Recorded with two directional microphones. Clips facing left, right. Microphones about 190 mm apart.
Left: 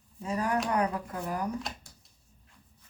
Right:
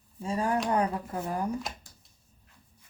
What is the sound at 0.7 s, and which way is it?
Shuffling cards, 25° right (ahead or behind).